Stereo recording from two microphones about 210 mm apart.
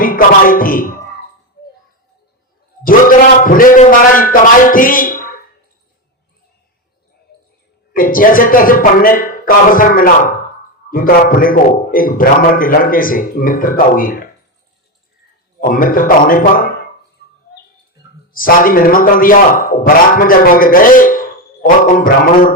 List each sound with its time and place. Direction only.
0.0 s speech: 40° left (ahead or behind)
2.8 s a man's voice: 40° left (ahead or behind)
7.9 s a man's voice: 40° left (ahead or behind)
15.7 s a man's voice: 40° left (ahead or behind)
18.3 s a man's voice: 40° left (ahead or behind)